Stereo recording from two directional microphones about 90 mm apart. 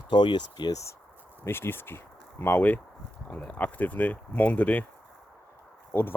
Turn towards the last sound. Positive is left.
turn(degrees=25)  # may be behind; listen again after turning